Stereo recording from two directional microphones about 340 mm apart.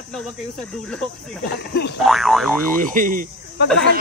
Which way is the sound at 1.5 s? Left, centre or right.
Left.